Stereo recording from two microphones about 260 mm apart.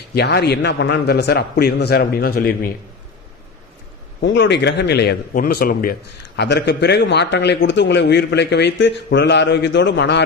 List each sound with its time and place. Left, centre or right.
0.1 s a man's voice: left
4.2 s a man's voice: left